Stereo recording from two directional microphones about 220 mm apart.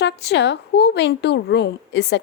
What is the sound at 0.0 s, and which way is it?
A woman's voice, 50° left (ahead or behind).